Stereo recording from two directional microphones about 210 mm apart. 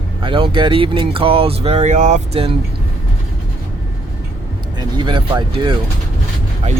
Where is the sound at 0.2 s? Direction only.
25° right (ahead or behind).